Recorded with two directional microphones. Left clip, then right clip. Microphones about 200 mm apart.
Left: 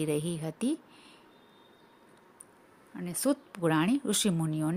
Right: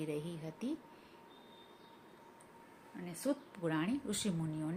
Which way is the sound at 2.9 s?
50° left (ahead or behind).